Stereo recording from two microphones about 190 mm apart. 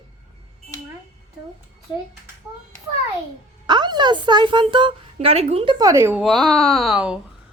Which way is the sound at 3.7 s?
25° right (ahead or behind).